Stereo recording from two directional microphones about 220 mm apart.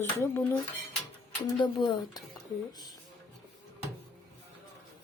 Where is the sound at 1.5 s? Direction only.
20° left (ahead or behind).